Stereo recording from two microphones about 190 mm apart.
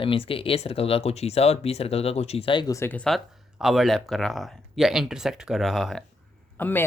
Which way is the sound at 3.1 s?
Centre (ahead or behind).